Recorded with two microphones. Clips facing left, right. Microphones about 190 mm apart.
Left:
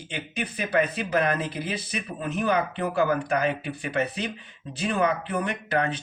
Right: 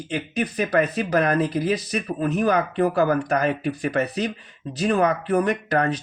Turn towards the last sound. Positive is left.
turn(degrees=-40)  # may be behind; listen again after turning